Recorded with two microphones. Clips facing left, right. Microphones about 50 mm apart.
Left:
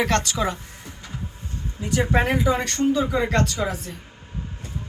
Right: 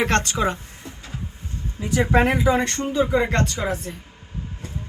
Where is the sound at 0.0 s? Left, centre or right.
Right.